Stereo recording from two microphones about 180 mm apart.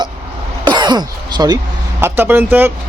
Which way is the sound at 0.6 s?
25° right (ahead or behind).